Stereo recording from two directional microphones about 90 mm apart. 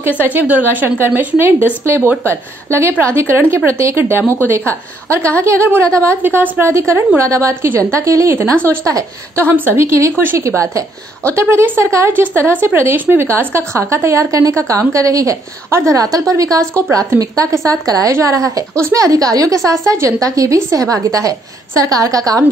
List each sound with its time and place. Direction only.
0.2 s a woman's voice: 20° right (ahead or behind)
3.0 s a woman's voice: 30° right (ahead or behind)